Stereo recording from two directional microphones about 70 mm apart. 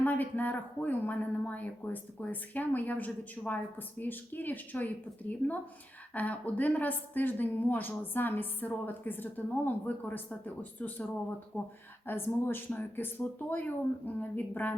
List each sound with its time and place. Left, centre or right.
0.0 s speech: left